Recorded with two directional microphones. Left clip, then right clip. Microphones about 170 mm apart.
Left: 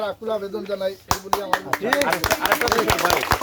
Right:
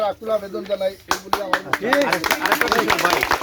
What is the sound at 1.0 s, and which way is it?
Speech, 30° left (ahead or behind).